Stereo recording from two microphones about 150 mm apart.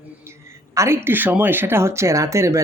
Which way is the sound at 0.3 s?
20° right (ahead or behind).